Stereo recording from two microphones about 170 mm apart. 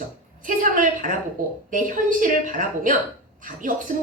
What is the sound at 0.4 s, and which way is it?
A woman's voice, 50° right (ahead or behind).